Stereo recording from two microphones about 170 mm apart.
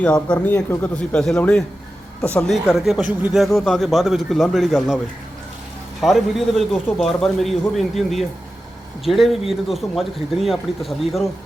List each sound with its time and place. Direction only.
0.0 s a man's voice: 5° left (ahead or behind)
6.0 s a man's voice: centre (ahead or behind)